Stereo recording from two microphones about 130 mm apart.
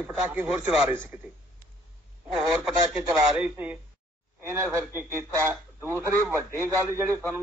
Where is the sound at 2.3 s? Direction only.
5° right (ahead or behind).